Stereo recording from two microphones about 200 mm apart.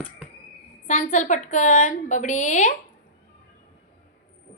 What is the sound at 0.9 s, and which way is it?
A woman's voice, 40° left (ahead or behind).